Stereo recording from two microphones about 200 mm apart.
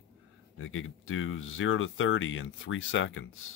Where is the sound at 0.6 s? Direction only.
85° left.